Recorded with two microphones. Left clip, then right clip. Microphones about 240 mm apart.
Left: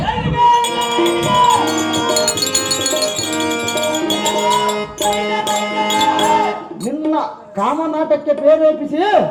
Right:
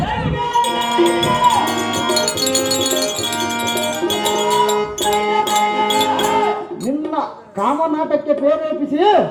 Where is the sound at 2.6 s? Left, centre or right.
Left.